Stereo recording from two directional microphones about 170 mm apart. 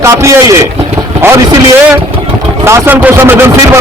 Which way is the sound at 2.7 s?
10° right (ahead or behind).